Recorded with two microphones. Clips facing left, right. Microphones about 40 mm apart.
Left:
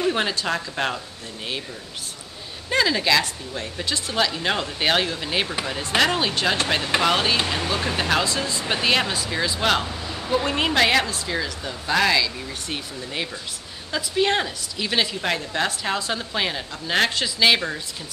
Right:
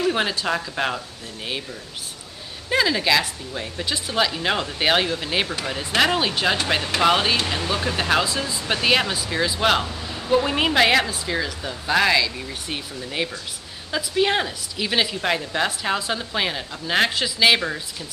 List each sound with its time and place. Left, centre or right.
0.1 s a woman's voice: centre
2.7 s a woman's voice: centre
7.4 s a woman's voice: centre